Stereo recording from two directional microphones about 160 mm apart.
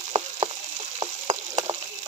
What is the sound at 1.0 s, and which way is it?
Frying, 35° right (ahead or behind).